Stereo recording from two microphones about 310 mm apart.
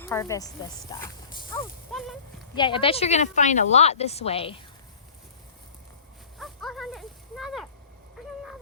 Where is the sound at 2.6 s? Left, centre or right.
Centre.